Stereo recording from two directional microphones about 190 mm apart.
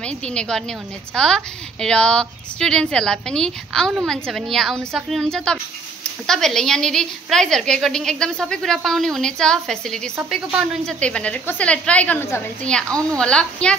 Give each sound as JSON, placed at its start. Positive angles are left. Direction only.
{"t": 0.0, "sound": "a woman's voice", "side_deg": 5}
{"t": 12.8, "sound": "a woman's voice", "side_deg": -15}
{"t": 13.2, "sound": "a woman's voice", "side_deg": 5}